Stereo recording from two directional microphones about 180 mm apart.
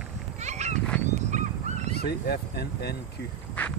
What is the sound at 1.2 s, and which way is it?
Dog, 40° right (ahead or behind).